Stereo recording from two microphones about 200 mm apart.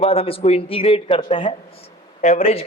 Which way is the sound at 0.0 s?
30° left (ahead or behind).